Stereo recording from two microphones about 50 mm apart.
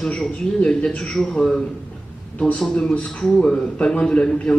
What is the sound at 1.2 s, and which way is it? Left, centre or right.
Speech, centre.